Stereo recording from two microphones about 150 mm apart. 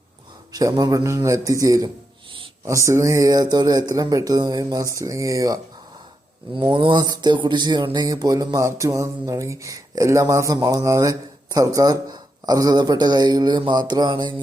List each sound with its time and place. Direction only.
0.5 s speech: 25° right (ahead or behind)
6.6 s speech: 35° right (ahead or behind)